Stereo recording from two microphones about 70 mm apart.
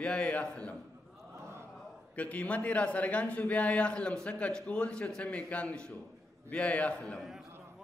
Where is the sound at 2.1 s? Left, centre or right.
Left.